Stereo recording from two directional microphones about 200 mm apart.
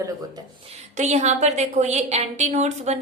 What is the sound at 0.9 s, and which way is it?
A woman's voice, 35° right (ahead or behind).